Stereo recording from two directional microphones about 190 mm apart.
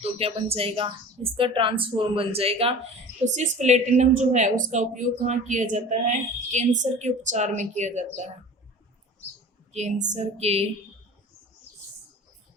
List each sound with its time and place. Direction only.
0.0 s a woman's voice: 30° right (ahead or behind)
9.7 s a woman's voice: 40° right (ahead or behind)